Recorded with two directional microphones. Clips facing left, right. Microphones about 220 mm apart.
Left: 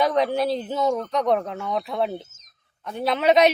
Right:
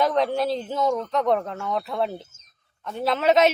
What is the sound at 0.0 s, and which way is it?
A woman's voice, centre (ahead or behind).